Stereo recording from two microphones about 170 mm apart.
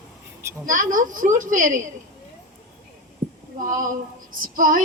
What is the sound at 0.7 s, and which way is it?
A woman's voice, 50° right (ahead or behind).